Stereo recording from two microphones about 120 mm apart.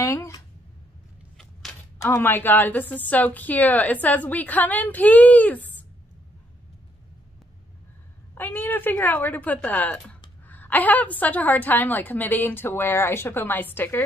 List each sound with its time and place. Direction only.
0.0 s speech: 25° left (ahead or behind)
1.4 s a sound: centre (ahead or behind)
2.0 s a woman's voice: 15° left (ahead or behind)
8.4 s a woman's voice: 15° left (ahead or behind)